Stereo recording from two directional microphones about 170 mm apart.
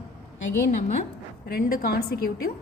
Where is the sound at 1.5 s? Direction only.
60° left (ahead or behind).